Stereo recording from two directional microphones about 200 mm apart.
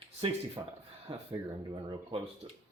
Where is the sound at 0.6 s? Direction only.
20° right (ahead or behind).